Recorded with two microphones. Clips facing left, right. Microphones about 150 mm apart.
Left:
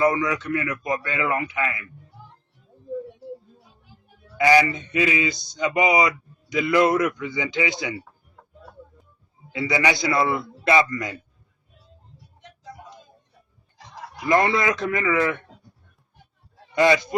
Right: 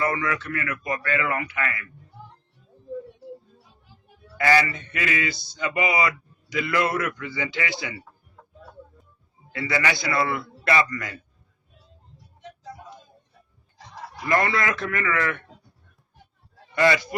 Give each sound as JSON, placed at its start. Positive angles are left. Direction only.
{"t": 0.0, "sound": "speech", "side_deg": 20}
{"t": 4.4, "sound": "speech", "side_deg": 20}
{"t": 9.5, "sound": "speech", "side_deg": 20}
{"t": 14.3, "sound": "speech", "side_deg": 20}
{"t": 16.7, "sound": "speech", "side_deg": 20}